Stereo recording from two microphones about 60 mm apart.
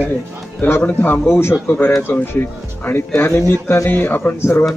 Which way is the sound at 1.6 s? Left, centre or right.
Left.